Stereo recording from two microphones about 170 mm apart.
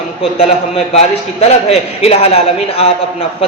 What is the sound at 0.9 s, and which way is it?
A man's voice, 40° left (ahead or behind).